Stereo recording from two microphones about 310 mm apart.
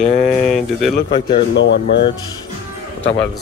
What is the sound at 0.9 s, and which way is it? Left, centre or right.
Speech, centre.